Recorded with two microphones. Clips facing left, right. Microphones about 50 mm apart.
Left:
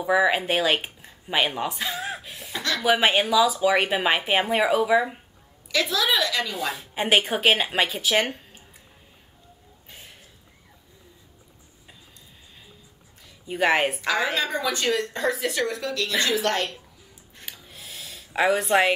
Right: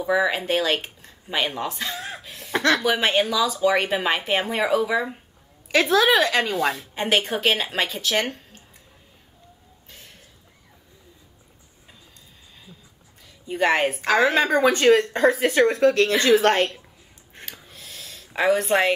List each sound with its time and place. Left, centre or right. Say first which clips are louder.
0.0 s speech: left 1 dB; centre
2.5 s speech: right 8 dB; right
2.8 s speech: even; centre
5.7 s speech: right 6 dB; right
6.7 s speech: left 1 dB; centre
9.8 s a sound: left 1 dB; centre
13.5 s speech: right 1 dB; centre
14.3 s speech: right 7 dB; right
17.6 s snort: even; centre